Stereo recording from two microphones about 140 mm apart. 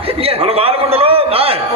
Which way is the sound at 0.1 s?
45° right (ahead or behind).